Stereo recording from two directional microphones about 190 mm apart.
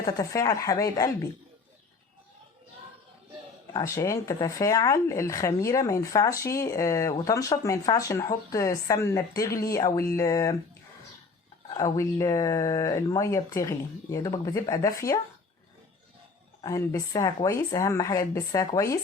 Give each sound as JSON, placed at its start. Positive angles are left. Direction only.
{"t": 0.0, "sound": "speech", "side_deg": 15}
{"t": 3.7, "sound": "speech", "side_deg": 20}
{"t": 11.7, "sound": "speech", "side_deg": 20}
{"t": 16.6, "sound": "speech", "side_deg": 15}